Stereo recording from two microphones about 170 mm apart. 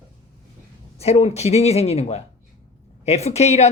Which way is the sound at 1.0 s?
40° left (ahead or behind).